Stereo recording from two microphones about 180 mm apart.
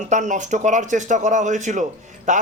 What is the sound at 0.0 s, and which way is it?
Speech, 40° right (ahead or behind).